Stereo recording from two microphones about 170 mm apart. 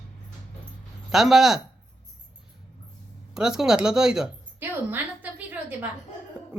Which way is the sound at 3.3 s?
5° right (ahead or behind).